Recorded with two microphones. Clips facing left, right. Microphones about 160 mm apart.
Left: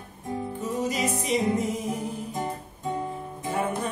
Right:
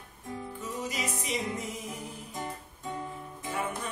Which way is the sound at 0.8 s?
35° left (ahead or behind).